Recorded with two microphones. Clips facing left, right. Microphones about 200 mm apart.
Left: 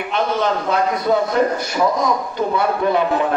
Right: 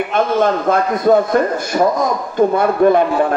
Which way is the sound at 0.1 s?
50° right (ahead or behind).